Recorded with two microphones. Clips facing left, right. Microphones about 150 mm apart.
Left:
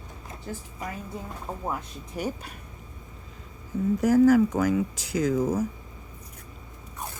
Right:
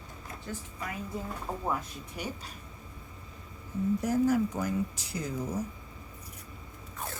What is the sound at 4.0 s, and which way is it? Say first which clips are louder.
Speech: left 9 dB; 90° left.